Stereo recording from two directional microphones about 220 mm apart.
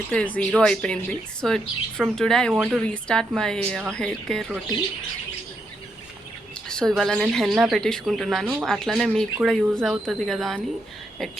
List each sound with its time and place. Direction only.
0.1 s speech: 5° left (ahead or behind)
6.5 s speech: 5° left (ahead or behind)